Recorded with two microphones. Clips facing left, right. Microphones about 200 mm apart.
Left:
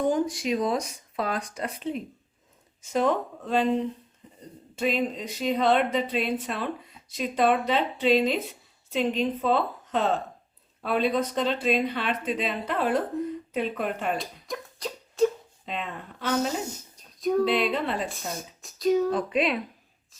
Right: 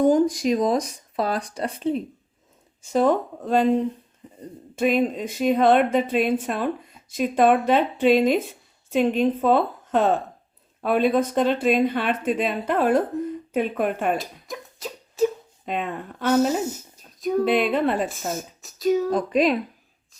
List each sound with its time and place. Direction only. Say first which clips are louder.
0.1 s speech: right 6 dB; 40° right (ahead or behind)
4.7 s speech: right 6 dB; 50° right (ahead or behind)
14.2 s a sound: right 1 dB; centre (ahead or behind)
15.6 s speech: right 6 dB; 50° right (ahead or behind)
16.6 s a sound: right 7 dB; 5° right (ahead or behind)
17.4 s speech: right 4 dB; 50° right (ahead or behind)
18.6 s speech: right 1 dB; centre (ahead or behind)
19.1 s speech: right 5 dB; 40° right (ahead or behind)